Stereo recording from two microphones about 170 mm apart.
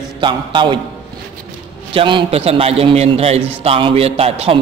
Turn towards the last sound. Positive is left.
turn(degrees=-35)  # may be behind; listen again after turning